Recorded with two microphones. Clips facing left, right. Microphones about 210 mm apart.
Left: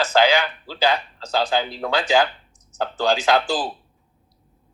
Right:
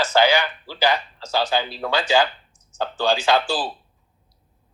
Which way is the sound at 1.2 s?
15° left (ahead or behind).